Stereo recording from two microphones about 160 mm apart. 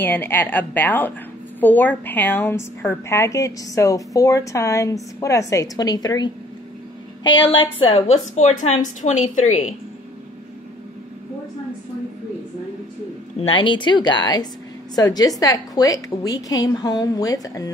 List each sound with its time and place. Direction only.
0.0 s a woman's voice: 10° left (ahead or behind); by 9.7 s 50° left (ahead or behind)
13.4 s a woman's voice: 35° left (ahead or behind)